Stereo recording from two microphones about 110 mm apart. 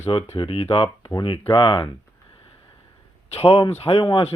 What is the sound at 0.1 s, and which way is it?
Speech, 60° left (ahead or behind).